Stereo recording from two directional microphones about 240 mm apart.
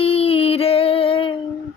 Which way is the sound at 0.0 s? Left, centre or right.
Left.